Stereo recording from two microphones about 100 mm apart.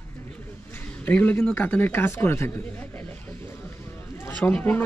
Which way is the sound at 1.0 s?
15° left (ahead or behind).